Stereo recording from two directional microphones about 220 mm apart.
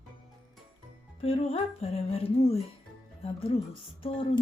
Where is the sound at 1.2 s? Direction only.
25° left (ahead or behind).